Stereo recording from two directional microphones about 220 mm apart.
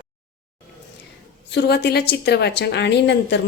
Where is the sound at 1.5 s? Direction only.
50° left (ahead or behind).